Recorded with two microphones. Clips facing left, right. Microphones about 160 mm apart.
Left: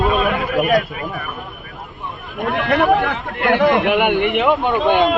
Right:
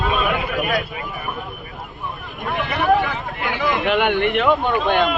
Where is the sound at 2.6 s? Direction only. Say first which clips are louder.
Left 2 dB; 65° left (ahead or behind).